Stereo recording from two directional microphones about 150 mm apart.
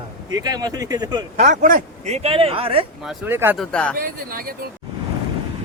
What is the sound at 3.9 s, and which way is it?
Speech, 70° right (ahead or behind).